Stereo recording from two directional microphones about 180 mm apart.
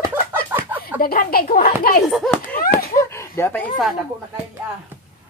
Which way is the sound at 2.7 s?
15° left (ahead or behind).